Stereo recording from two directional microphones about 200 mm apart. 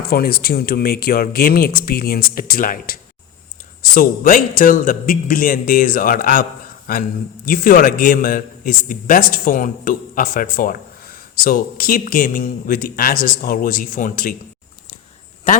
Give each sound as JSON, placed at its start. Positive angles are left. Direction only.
{"t": 0.0, "sound": "a man's voice", "side_deg": 50}
{"t": 7.4, "sound": "a man's voice", "side_deg": 45}